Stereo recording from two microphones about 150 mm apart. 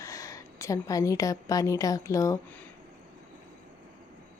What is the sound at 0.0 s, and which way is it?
A woman's voice, 20° left (ahead or behind).